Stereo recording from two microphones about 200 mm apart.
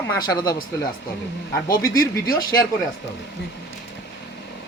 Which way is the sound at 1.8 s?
20° left (ahead or behind).